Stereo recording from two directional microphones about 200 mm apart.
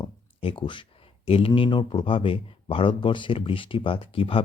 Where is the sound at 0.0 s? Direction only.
25° left (ahead or behind).